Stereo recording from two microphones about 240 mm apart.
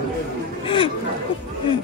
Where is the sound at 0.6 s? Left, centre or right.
Left.